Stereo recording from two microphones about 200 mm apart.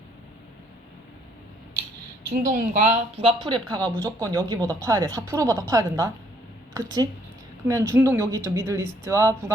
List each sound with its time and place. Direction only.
2.3 s a woman's voice: 40° right (ahead or behind); by 9.3 s 15° right (ahead or behind)